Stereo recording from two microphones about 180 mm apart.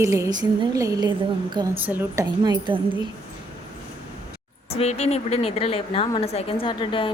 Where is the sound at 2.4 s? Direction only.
20° right (ahead or behind).